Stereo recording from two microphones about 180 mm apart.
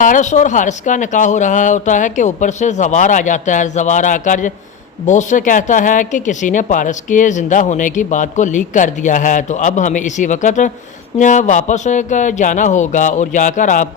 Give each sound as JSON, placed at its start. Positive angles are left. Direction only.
{"t": 0.0, "sound": "speech", "side_deg": 45}